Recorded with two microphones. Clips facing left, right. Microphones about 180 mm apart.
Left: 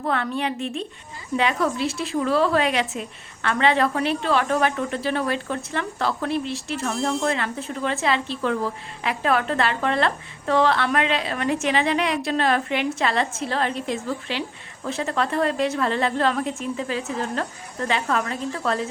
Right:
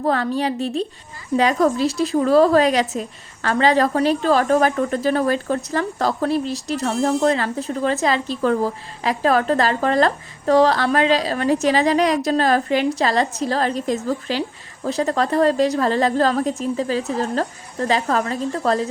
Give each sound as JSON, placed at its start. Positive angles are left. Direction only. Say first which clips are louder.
{"t": 0.0, "sound": "a woman's voice", "louder": "right 5 dB", "side_deg": -35}